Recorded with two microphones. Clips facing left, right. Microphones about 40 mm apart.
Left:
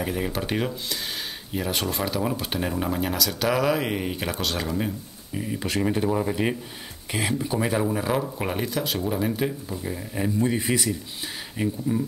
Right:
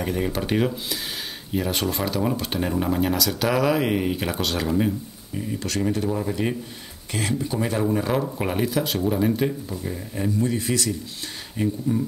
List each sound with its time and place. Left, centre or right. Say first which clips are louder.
0.0 s speech: right 2 dB; centre
5.3 s speech: even; centre
10.4 s speech: left 1 dB; centre